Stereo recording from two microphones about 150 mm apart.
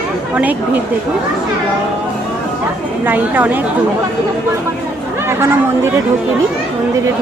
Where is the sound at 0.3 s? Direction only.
10° right (ahead or behind).